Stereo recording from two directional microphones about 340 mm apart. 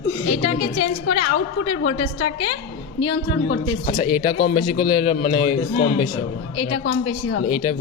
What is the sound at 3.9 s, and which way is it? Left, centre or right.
A man's voice, left.